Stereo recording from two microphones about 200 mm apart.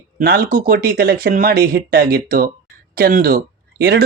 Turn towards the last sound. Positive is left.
turn(degrees=-50)  # may be behind; listen again after turning